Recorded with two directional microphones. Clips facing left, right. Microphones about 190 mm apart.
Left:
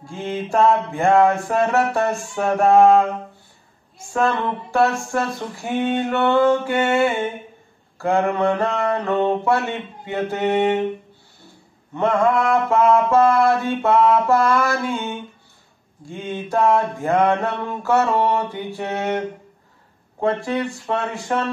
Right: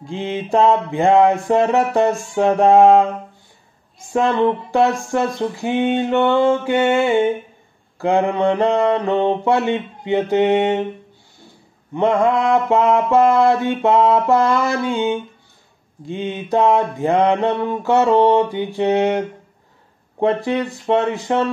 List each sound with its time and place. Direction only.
0.0 s mantra: 20° right (ahead or behind)
4.1 s mantra: 20° right (ahead or behind)
11.9 s mantra: 20° right (ahead or behind)
16.1 s mantra: 20° right (ahead or behind)
20.2 s mantra: 20° right (ahead or behind)